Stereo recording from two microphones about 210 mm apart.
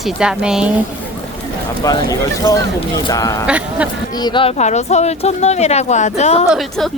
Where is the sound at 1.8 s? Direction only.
15° left (ahead or behind).